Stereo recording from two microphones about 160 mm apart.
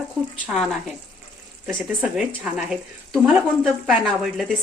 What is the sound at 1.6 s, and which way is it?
Speech, 5° right (ahead or behind).